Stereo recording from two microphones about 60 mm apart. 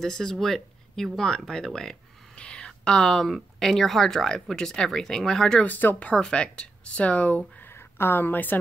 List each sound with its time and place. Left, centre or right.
0.0 s speech: centre
5.6 s speech: left
6.1 s speech: centre
7.7 s speech: left